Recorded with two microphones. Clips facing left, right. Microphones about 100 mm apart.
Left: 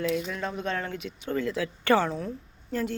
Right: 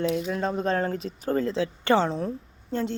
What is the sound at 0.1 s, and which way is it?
A woman's voice, 35° right (ahead or behind).